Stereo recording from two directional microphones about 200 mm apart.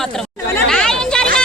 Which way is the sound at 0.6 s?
5° left (ahead or behind).